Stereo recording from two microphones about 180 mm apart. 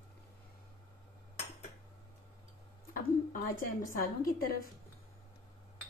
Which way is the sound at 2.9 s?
50° left (ahead or behind).